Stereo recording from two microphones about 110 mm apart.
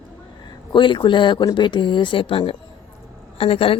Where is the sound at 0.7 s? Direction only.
45° left (ahead or behind).